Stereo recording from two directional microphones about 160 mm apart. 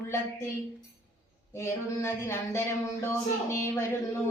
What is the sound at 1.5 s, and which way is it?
A woman's voice, 15° left (ahead or behind).